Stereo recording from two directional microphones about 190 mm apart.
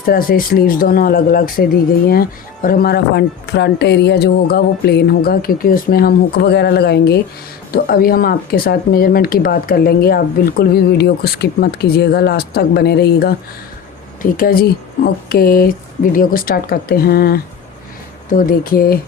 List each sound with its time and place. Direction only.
0.0 s speech: 50° left (ahead or behind)